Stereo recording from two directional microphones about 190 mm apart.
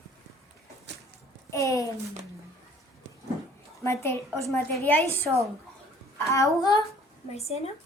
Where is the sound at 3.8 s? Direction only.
15° left (ahead or behind).